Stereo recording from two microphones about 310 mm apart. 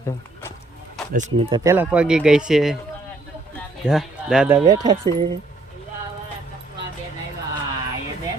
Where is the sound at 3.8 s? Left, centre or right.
Centre.